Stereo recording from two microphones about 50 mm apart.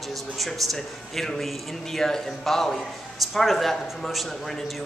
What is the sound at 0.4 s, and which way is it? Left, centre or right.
A woman's voice, centre.